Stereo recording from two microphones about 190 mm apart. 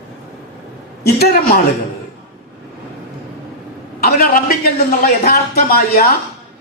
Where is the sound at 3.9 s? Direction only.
50° left (ahead or behind).